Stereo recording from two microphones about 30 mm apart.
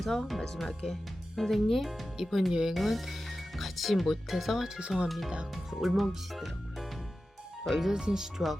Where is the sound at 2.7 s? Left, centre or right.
Centre.